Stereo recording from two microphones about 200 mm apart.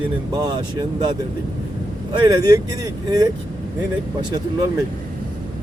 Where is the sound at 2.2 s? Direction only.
20° right (ahead or behind).